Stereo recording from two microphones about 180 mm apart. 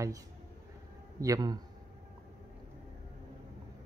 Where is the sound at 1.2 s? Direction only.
20° right (ahead or behind).